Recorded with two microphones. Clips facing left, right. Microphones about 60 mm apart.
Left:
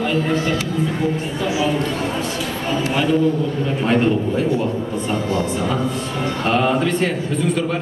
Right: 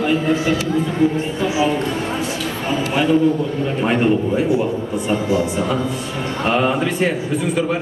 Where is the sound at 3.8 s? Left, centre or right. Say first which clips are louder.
Even; centre.